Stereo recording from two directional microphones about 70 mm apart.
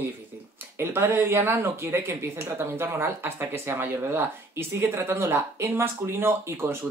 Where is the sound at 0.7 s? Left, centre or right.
Right.